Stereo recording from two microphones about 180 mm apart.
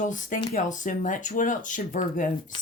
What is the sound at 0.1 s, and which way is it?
Speech, 45° left (ahead or behind).